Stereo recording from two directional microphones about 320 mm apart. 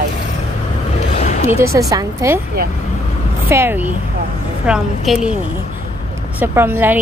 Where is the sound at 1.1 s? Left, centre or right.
Left.